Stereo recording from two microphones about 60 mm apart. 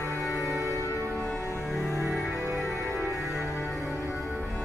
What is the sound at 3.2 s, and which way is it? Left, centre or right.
Music, right.